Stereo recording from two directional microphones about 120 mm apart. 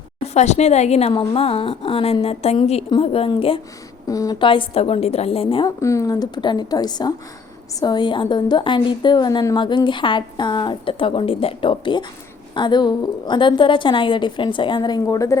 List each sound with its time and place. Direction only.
0.3 s a woman's voice: 70° left (ahead or behind); by 3.6 s 50° left (ahead or behind)
4.0 s a woman's voice: 30° left (ahead or behind)
4.4 s a woman's voice: 45° left (ahead or behind)
5.6 s a woman's voice: 25° left (ahead or behind)